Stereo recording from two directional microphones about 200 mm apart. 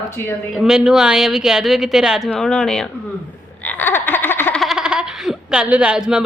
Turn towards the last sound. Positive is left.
turn(degrees=-5)  # may be behind; listen again after turning